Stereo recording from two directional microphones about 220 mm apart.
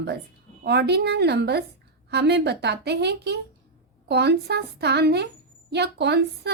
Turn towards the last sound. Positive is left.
turn(degrees=-50)  # may be behind; listen again after turning